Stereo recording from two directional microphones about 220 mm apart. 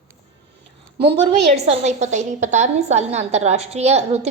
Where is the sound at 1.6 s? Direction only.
30° right (ahead or behind).